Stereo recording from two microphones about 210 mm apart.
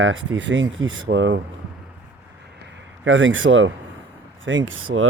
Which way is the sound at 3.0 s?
60° right (ahead or behind).